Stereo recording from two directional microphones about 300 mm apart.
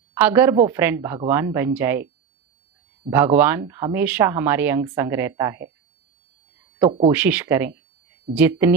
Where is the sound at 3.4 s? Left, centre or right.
Centre.